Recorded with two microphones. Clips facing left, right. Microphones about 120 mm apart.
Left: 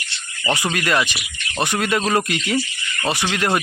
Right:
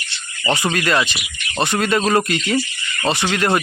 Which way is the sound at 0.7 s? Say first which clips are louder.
Right 2 dB; 10° left (ahead or behind).